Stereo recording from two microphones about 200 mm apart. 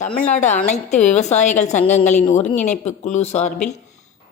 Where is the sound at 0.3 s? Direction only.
35° left (ahead or behind).